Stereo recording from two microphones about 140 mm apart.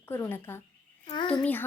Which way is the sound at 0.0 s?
15° left (ahead or behind).